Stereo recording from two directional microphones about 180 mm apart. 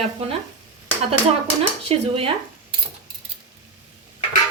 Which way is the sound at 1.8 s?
30° right (ahead or behind).